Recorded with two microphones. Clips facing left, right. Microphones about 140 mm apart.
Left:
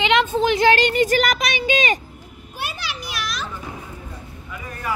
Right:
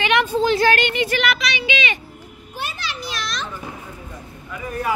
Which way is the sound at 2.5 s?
10° left (ahead or behind).